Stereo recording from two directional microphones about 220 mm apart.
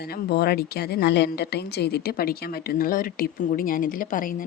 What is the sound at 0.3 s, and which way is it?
A woman's voice, 45° left (ahead or behind).